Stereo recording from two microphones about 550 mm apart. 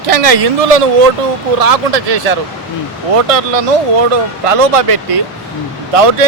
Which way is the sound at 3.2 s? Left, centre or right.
Right.